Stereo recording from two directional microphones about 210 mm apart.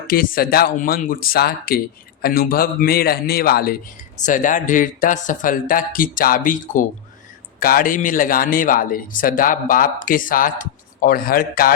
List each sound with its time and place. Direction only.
0.1 s speech: 45° left (ahead or behind)